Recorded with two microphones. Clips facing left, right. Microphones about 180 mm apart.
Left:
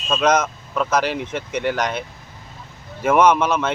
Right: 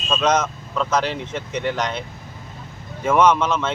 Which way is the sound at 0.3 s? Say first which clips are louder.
Left 1 dB; 15° left (ahead or behind).